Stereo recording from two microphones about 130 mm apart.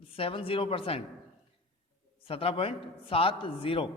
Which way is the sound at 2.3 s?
45° left (ahead or behind).